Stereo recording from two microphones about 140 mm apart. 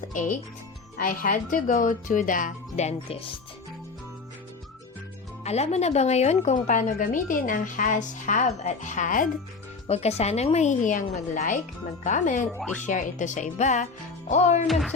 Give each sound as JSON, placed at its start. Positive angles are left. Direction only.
{"t": 0.1, "sound": "speech", "side_deg": 70}
{"t": 5.4, "sound": "speech", "side_deg": 50}
{"t": 9.9, "sound": "a woman's voice", "side_deg": 50}
{"t": 14.7, "sound": "speech", "side_deg": 0}